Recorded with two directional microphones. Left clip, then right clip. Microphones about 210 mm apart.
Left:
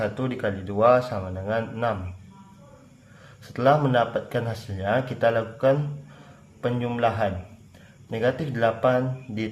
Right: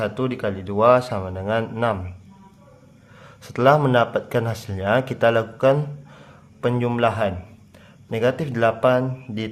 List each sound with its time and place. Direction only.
0.0 s a man's voice: 25° right (ahead or behind)
3.4 s a man's voice: 35° right (ahead or behind)